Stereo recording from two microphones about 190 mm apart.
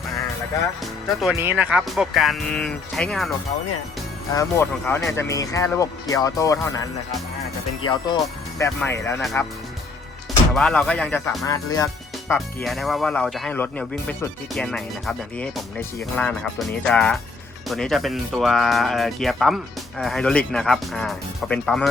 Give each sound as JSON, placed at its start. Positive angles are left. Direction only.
{"t": 0.8, "sound": "speech", "side_deg": 0}
{"t": 4.4, "sound": "speech", "side_deg": 15}
{"t": 7.9, "sound": "speech", "side_deg": 20}
{"t": 11.4, "sound": "speech", "side_deg": 20}
{"t": 12.6, "sound": "speech", "side_deg": 0}